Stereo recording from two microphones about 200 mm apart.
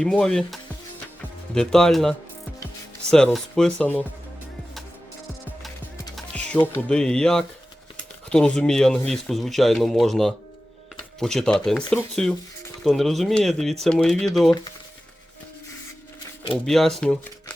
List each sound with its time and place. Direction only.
0.0 s speech: 5° left (ahead or behind)
6.1 s speech: 5° left (ahead or behind)
16.6 s speech: centre (ahead or behind)